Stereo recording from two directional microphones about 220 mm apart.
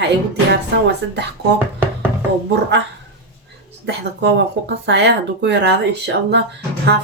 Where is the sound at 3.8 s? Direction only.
55° right (ahead or behind).